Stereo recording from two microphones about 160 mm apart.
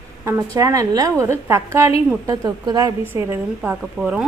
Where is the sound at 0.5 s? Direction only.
20° right (ahead or behind).